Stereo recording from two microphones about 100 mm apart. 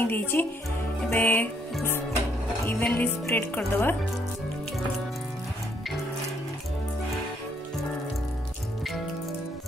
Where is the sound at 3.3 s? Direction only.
20° left (ahead or behind).